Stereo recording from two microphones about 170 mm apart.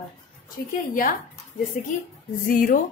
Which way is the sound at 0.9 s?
55° left (ahead or behind).